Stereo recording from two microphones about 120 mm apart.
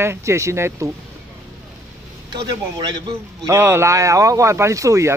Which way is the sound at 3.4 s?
20° right (ahead or behind).